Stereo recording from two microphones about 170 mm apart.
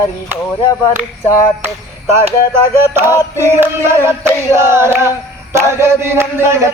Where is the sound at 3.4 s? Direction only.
15° right (ahead or behind).